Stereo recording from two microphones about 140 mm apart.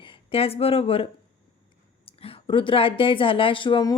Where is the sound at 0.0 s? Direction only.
40° left (ahead or behind).